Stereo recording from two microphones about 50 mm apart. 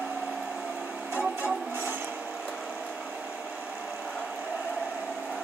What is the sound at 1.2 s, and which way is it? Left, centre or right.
Music, right.